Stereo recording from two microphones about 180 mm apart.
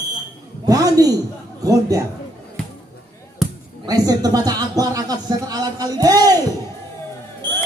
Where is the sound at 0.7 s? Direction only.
20° right (ahead or behind).